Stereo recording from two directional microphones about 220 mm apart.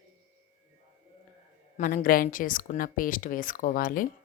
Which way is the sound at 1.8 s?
40° left (ahead or behind).